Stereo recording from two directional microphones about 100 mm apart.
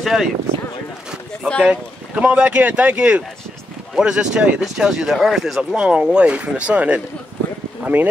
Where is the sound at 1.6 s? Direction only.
10° right (ahead or behind).